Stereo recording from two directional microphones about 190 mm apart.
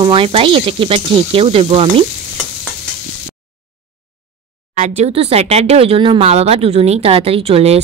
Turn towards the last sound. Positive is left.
turn(degrees=-30)  # may be behind; listen again after turning